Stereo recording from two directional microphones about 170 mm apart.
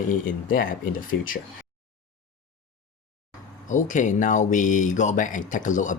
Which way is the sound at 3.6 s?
45° left (ahead or behind).